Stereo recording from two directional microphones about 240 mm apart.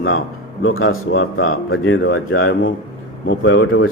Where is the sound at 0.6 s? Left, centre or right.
Left.